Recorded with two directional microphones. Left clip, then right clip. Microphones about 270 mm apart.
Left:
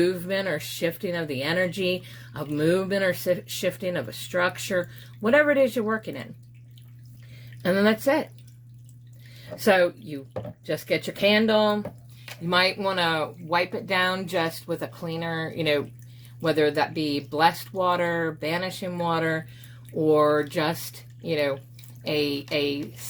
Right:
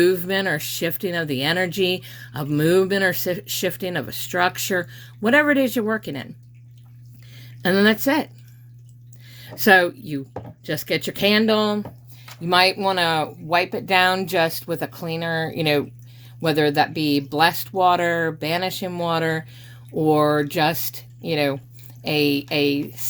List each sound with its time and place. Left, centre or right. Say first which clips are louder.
0.0 s speech: right 6 dB; right
7.3 s speech: right 4 dB; right
9.4 s speech: right 5 dB; right